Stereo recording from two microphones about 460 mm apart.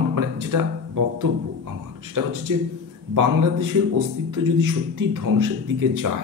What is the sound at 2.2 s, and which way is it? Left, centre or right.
Speech, right.